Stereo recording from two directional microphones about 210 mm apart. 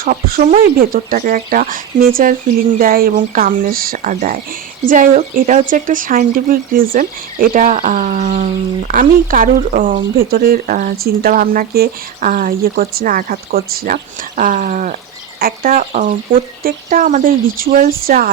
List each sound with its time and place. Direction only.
0.0 s speech: 45° right (ahead or behind)